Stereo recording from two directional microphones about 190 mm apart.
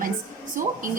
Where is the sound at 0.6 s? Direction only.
45° right (ahead or behind).